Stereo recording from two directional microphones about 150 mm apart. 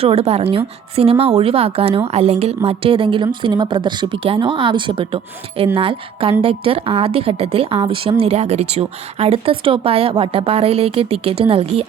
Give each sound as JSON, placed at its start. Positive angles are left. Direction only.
{"t": 0.0, "sound": "a woman's voice", "side_deg": -40}